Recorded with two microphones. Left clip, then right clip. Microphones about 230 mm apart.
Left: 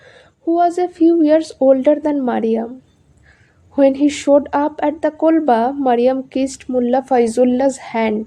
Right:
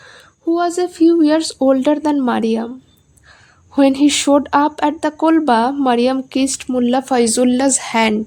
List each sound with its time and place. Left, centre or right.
0.0 s speech: right
3.8 s speech: right